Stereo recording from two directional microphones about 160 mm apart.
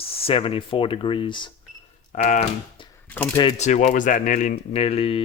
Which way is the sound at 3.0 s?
10° left (ahead or behind).